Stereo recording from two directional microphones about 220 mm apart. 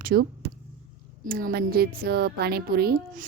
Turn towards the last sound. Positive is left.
turn(degrees=-45)  # may be behind; listen again after turning